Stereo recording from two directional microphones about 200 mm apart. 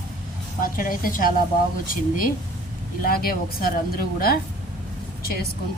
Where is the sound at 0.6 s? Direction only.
45° left (ahead or behind).